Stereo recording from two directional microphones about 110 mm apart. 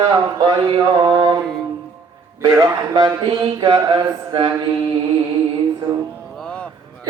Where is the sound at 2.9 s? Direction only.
40° right (ahead or behind).